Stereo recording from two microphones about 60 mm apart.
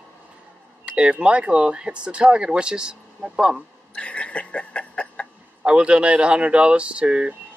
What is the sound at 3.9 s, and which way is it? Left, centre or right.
Chuckle, left.